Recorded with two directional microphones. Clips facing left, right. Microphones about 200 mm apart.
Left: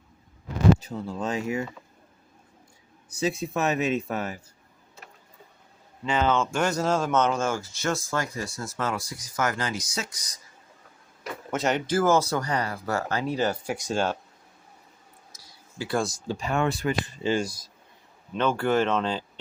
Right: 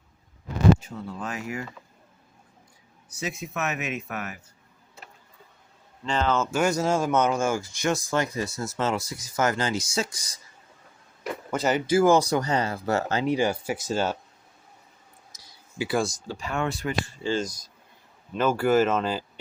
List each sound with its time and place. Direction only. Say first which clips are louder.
0.8 s speech: left 3 dB; 30° left (ahead or behind)
3.1 s speech: left 6 dB; 30° left (ahead or behind)
6.1 s speech: left 1 dB; centre (ahead or behind); by 10.4 s 30° right (ahead or behind)
11.5 s speech: right 2 dB; centre (ahead or behind); by 13.3 s 25° right (ahead or behind)
13.3 s speech: right 2 dB; 10° right (ahead or behind)
15.8 s speech: right 2 dB; 5° right (ahead or behind)
16.3 s speech: left 7 dB; 20° left (ahead or behind)
18.3 s speech: right 2 dB; 5° right (ahead or behind)